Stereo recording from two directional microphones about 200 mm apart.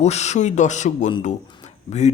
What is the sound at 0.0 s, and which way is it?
Speech, 35° left (ahead or behind).